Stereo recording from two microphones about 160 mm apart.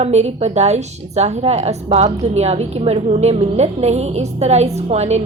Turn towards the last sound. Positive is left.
turn(degrees=-45)  # may be behind; listen again after turning